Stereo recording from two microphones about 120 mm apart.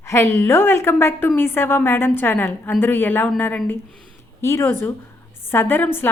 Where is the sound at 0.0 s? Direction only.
20° left (ahead or behind).